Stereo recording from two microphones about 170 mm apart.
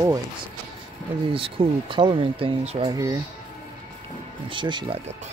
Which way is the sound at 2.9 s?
20° right (ahead or behind).